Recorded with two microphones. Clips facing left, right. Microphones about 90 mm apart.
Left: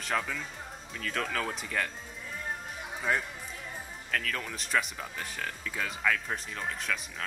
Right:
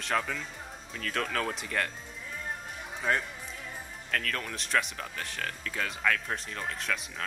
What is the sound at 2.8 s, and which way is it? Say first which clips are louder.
Music: right 1 dB; 5° left (ahead or behind).